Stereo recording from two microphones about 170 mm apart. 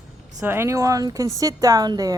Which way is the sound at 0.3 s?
15° right (ahead or behind).